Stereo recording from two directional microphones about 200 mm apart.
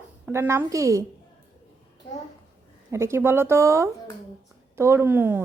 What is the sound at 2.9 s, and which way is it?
A woman's voice, 15° right (ahead or behind).